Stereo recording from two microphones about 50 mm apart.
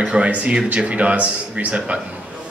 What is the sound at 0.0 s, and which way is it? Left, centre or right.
Speech, right.